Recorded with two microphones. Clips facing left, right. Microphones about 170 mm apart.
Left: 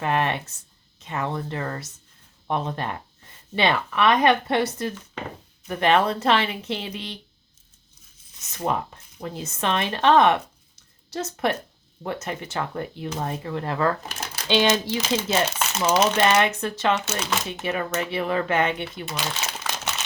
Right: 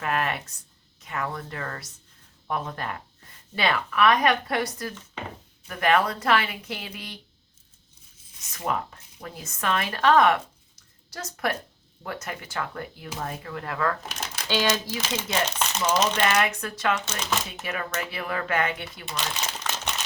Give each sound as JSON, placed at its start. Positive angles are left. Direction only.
{"t": 0.0, "sound": "speech", "side_deg": 25}
{"t": 8.5, "sound": "speech", "side_deg": 25}
{"t": 14.1, "sound": "crumpling", "side_deg": 5}
{"t": 14.4, "sound": "speech", "side_deg": 20}
{"t": 15.4, "sound": "speech", "side_deg": 5}
{"t": 16.2, "sound": "speech", "side_deg": 25}
{"t": 19.0, "sound": "crumpling", "side_deg": 5}